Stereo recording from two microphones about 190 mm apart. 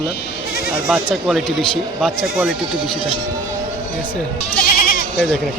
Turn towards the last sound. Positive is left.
turn(degrees=50)  # may be behind; listen again after turning